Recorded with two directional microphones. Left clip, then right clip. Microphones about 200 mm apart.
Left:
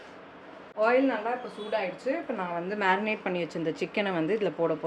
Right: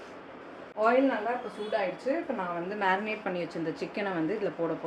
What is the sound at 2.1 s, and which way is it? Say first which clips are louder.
A woman's voice: even; 30° left (ahead or behind).